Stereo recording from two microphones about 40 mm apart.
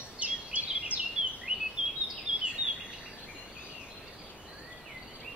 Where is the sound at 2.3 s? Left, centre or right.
Right.